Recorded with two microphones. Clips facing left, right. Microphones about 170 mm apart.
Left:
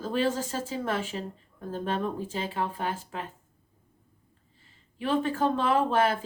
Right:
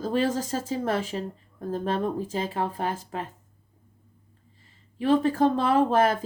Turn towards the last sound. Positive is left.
turn(degrees=-40)  # may be behind; listen again after turning